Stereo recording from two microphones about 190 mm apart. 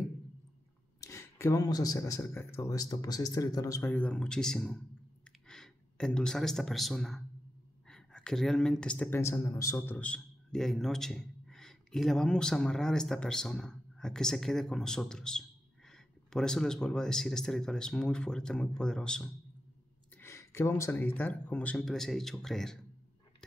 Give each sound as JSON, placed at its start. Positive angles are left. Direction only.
{"t": 1.0, "sound": "speech", "side_deg": 15}